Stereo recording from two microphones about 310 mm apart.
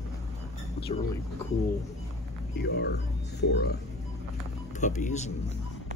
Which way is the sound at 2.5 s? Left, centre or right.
Left.